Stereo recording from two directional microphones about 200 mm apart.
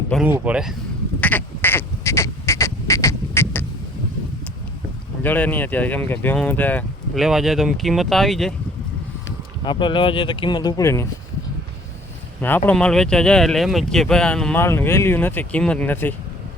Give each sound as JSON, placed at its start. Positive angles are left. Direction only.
{"t": 0.1, "sound": "speech", "side_deg": -5}
{"t": 1.2, "sound": "duck", "side_deg": 10}
{"t": 5.2, "sound": "speech", "side_deg": 10}
{"t": 9.6, "sound": "speech", "side_deg": 25}
{"t": 12.4, "sound": "speech", "side_deg": 10}